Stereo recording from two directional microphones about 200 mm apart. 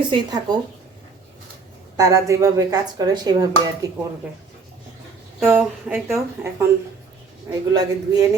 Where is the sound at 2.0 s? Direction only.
15° right (ahead or behind).